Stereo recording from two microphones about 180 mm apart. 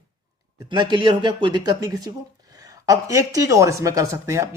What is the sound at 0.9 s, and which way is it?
Speech, 25° right (ahead or behind).